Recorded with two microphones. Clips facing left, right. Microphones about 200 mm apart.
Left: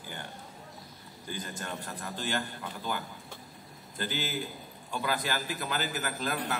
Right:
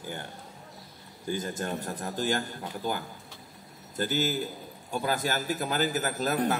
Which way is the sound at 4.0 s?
45° right (ahead or behind).